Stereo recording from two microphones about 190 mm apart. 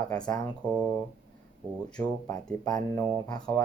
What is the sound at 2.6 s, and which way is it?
Speech, 20° left (ahead or behind).